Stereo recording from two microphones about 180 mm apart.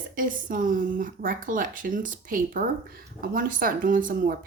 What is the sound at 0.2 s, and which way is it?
Speech, 50° right (ahead or behind).